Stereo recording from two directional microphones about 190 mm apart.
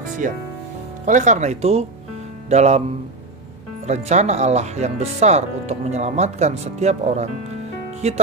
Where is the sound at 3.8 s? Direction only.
35° right (ahead or behind).